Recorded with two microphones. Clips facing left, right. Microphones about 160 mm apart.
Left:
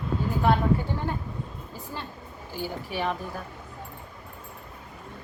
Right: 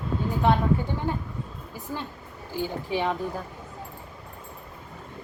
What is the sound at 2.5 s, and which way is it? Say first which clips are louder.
Speech: right 4 dB; 20° right (ahead or behind).